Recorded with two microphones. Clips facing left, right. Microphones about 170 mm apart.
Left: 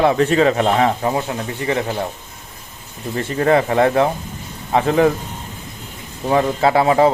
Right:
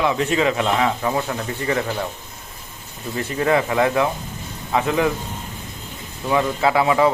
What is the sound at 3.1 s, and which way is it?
Speech, 40° left (ahead or behind).